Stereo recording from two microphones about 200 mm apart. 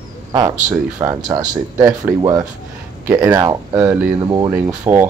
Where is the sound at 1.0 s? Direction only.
15° right (ahead or behind).